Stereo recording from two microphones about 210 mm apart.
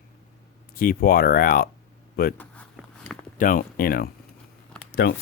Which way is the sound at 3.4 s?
40° left (ahead or behind).